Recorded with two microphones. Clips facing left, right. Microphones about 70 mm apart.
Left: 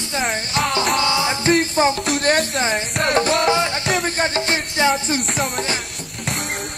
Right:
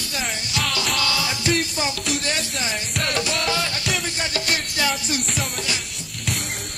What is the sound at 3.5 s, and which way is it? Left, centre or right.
Music, left.